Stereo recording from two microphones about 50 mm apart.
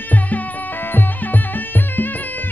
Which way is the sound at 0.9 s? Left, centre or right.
Left.